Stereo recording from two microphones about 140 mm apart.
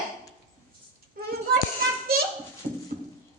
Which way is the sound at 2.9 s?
25° left (ahead or behind).